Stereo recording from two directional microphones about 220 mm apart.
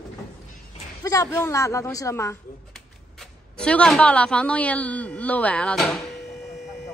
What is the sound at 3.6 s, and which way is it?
A woman's voice, 5° left (ahead or behind).